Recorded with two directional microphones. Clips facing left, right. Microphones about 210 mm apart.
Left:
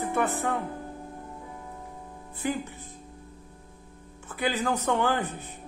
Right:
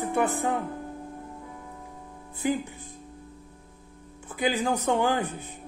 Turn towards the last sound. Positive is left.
turn(degrees=-15)  # may be behind; listen again after turning